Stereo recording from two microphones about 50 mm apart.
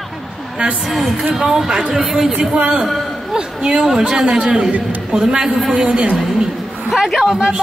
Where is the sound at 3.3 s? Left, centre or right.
Centre.